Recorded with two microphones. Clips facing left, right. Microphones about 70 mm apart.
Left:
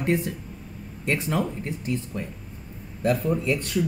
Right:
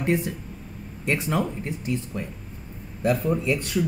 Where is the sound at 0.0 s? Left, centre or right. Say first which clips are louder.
Even; centre.